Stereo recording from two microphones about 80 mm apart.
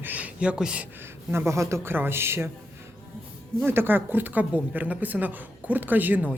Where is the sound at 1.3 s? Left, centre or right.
Right.